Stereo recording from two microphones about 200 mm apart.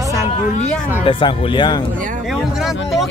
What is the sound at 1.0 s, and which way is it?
Speech, 25° left (ahead or behind).